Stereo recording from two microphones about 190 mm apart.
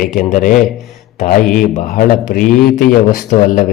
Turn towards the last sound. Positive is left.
turn(degrees=45)  # may be behind; listen again after turning